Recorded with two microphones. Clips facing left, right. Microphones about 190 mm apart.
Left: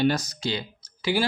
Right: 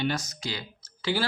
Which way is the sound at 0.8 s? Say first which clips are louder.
Left 3 dB; 15° left (ahead or behind).